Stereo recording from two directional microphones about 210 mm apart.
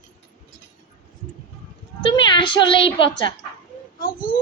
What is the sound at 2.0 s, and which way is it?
A woman's voice, 25° left (ahead or behind).